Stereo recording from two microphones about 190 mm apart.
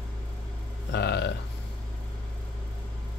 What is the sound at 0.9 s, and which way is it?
Speech, 60° left (ahead or behind).